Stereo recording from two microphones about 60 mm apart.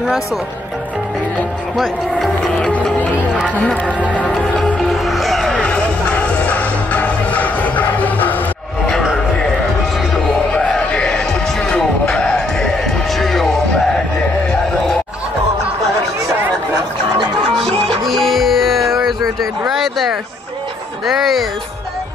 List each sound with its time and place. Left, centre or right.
1.8 s cattle: centre
3.5 s speech: left
4.7 s music: centre
5.6 s music: left
10.5 s music: centre
17.6 s music: centre
21.0 s a sound: centre